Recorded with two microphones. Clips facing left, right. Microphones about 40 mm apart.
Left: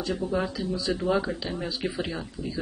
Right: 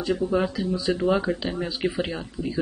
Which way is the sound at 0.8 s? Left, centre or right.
Right.